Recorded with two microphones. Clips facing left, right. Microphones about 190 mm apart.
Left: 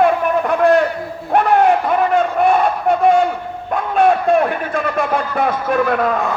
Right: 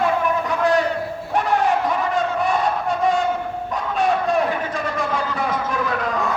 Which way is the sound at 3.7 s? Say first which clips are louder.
Left 7 dB; 55° left (ahead or behind).